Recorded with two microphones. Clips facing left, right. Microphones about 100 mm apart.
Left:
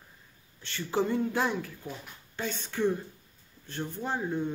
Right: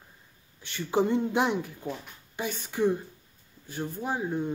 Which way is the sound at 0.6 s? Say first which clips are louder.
Right 3 dB; 15° right (ahead or behind).